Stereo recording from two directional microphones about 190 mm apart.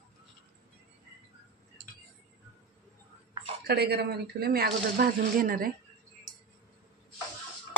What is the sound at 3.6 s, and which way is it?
Speech, 55° right (ahead or behind).